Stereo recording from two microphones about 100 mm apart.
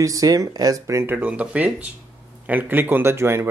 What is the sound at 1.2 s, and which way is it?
Speech, 15° right (ahead or behind).